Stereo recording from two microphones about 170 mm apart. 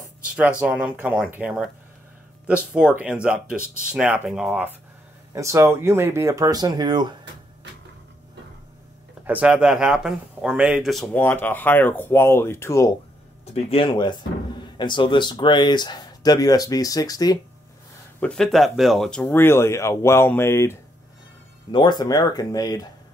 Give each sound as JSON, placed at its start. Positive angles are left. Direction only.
{"t": 0.2, "sound": "speech", "side_deg": -10}
{"t": 5.3, "sound": "speech", "side_deg": -15}
{"t": 9.2, "sound": "speech", "side_deg": -10}
{"t": 13.5, "sound": "speech", "side_deg": 35}
{"t": 18.2, "sound": "speech", "side_deg": 5}
{"t": 21.7, "sound": "speech", "side_deg": 25}